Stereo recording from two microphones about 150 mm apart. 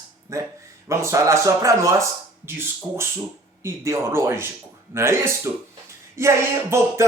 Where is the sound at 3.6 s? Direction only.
20° right (ahead or behind).